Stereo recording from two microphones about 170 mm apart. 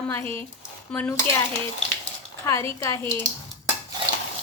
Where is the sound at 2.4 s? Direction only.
15° left (ahead or behind).